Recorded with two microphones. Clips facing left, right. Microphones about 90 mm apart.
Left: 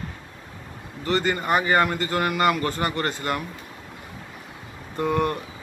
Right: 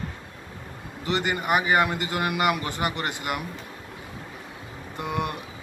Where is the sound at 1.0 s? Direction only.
15° right (ahead or behind).